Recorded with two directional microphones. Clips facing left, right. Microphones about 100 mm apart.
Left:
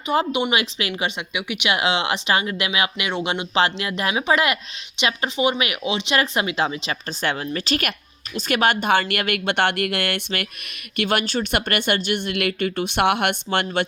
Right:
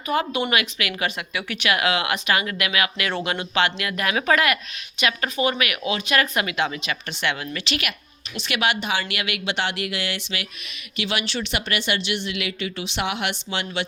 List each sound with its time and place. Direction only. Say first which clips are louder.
0.1 s speech: left 2 dB; 25° left (ahead or behind)
3.5 s speech: left 2 dB; 30° left (ahead or behind); by 13.8 s 55° left (ahead or behind)